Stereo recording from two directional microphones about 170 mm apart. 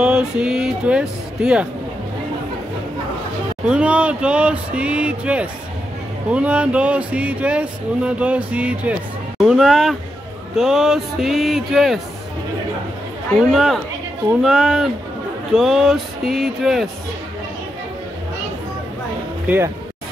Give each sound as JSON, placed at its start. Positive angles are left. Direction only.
{"t": 0.0, "sound": "speech", "side_deg": -5}
{"t": 3.6, "sound": "speech", "side_deg": -5}
{"t": 13.5, "sound": "speech", "side_deg": 0}
{"t": 19.4, "sound": "speech", "side_deg": -10}